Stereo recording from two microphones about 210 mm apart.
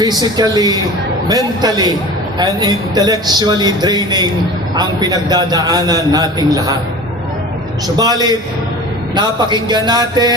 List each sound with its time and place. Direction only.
0.0 s a man's voice: 20° right (ahead or behind)
7.9 s a man's voice: 20° right (ahead or behind)